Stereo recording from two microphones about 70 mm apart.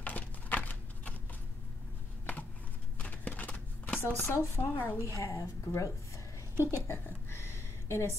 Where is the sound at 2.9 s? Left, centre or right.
Left.